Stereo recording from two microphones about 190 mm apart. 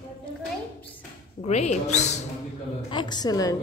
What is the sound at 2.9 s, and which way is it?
Speech, 25° left (ahead or behind).